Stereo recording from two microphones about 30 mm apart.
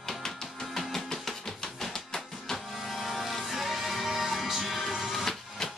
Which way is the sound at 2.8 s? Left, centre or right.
Centre.